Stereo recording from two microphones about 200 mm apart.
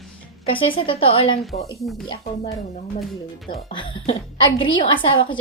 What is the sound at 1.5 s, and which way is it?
Speech, 45° left (ahead or behind).